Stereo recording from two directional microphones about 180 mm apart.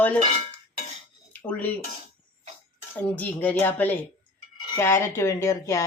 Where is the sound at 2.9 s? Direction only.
10° left (ahead or behind).